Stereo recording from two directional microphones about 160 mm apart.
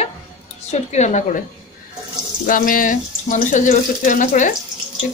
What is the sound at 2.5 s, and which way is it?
Speech, 60° left (ahead or behind).